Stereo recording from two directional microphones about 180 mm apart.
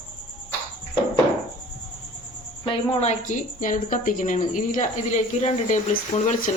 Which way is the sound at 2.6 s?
30° left (ahead or behind).